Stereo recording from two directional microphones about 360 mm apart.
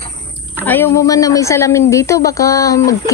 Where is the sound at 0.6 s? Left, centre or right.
Centre.